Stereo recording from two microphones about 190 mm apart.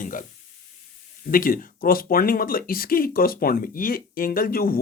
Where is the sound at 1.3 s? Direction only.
50° left (ahead or behind).